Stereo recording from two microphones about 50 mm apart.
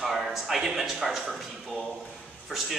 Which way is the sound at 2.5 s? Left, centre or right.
Centre.